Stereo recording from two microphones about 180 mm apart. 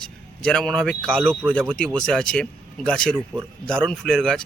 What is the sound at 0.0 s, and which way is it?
Speech, 5° left (ahead or behind).